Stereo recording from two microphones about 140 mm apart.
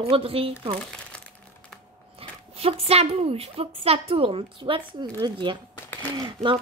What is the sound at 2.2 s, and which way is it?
A woman's voice, 45° right (ahead or behind).